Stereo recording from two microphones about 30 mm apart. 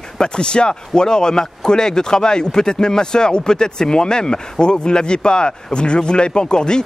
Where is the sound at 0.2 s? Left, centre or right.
Left.